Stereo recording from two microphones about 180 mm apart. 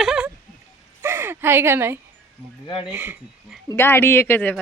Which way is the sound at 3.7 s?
15° left (ahead or behind).